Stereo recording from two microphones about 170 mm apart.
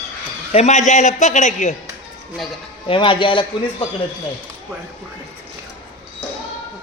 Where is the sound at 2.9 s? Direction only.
30° left (ahead or behind).